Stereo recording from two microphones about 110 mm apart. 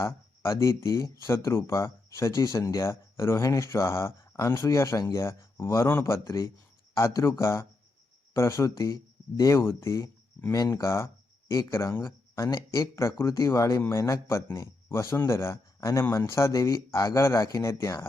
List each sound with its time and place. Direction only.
0.0 s speech: 25° left (ahead or behind)